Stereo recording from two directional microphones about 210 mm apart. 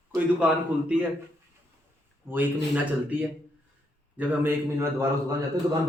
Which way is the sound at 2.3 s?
10° right (ahead or behind).